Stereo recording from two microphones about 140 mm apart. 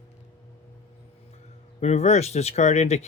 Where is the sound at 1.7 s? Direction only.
55° left (ahead or behind).